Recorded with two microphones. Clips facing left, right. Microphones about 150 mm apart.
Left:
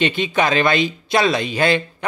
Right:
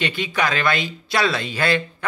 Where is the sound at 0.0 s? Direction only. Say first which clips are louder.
Left 5 dB; 20° left (ahead or behind).